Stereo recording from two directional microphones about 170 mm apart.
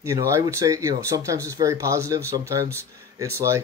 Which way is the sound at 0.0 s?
15° right (ahead or behind).